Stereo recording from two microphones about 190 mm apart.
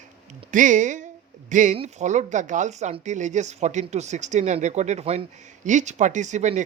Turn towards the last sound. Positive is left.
turn(degrees=-40)  # may be behind; listen again after turning